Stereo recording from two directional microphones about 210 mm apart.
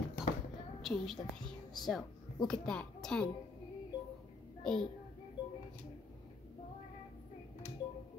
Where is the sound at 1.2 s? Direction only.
20° left (ahead or behind).